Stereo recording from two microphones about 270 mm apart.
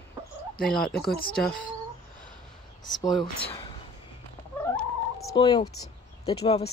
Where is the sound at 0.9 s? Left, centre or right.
Left.